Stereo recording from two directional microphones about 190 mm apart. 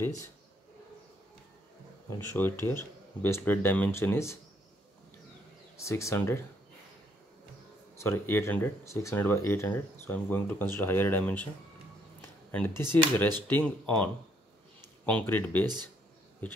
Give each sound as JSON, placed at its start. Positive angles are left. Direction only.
{"t": 0.0, "sound": "speech", "side_deg": 15}
{"t": 2.0, "sound": "speech", "side_deg": 10}
{"t": 5.8, "sound": "speech", "side_deg": 15}
{"t": 8.0, "sound": "speech", "side_deg": 15}
{"t": 12.4, "sound": "speech", "side_deg": 10}